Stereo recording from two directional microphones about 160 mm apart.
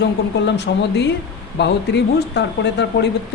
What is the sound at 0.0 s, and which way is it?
Speech, 90° left.